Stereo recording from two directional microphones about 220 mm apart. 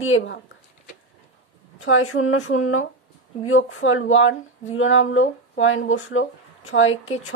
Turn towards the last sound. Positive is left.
turn(degrees=65)  # may be behind; listen again after turning